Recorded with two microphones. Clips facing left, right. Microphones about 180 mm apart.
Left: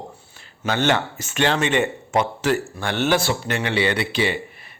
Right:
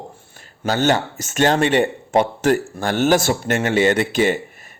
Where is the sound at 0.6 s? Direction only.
40° right (ahead or behind).